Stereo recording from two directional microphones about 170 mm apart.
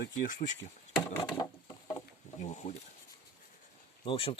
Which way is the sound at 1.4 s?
20° left (ahead or behind).